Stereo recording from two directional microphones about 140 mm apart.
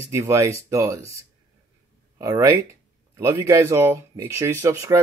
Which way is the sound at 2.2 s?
20° right (ahead or behind).